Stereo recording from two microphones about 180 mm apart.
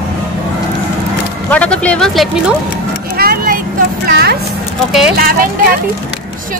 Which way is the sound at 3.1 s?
55° right (ahead or behind).